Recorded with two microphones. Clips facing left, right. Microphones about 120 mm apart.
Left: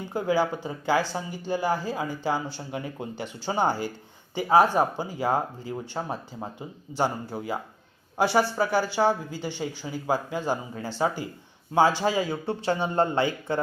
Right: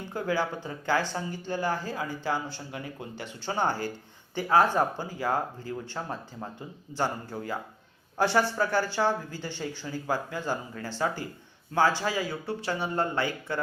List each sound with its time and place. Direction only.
0.1 s speech: 15° left (ahead or behind)